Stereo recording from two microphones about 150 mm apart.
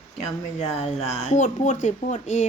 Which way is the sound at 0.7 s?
45° left (ahead or behind).